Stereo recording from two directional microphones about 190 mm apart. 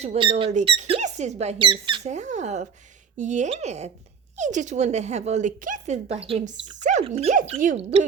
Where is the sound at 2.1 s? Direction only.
40° right (ahead or behind).